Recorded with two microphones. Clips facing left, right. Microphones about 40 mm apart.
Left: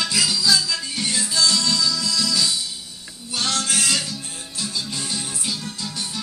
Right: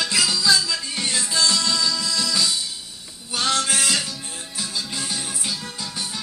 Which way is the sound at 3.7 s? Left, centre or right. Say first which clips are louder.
Even; centre.